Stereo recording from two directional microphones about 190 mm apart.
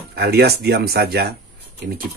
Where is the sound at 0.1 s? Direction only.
55° right (ahead or behind).